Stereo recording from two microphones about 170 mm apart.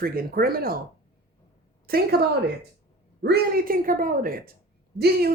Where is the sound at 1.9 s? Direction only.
60° right (ahead or behind).